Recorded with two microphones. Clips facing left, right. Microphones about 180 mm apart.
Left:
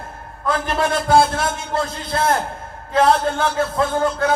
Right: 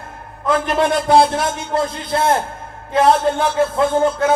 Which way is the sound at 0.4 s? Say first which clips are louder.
Right 4 dB; 25° right (ahead or behind).